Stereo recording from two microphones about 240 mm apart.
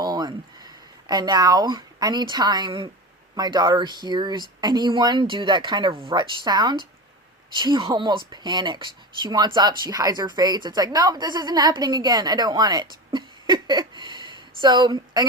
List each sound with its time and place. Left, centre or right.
0.0 s a woman's voice: centre